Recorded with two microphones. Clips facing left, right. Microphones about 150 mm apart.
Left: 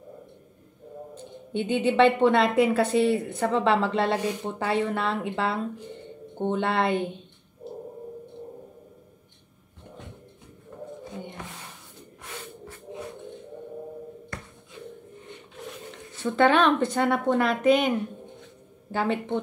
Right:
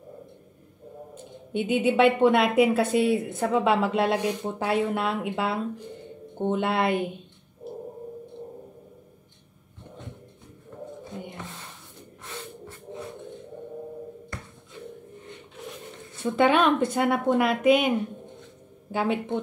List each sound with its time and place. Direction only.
1.1 s a woman's voice: 10° right (ahead or behind)
16.2 s a woman's voice: 10° right (ahead or behind)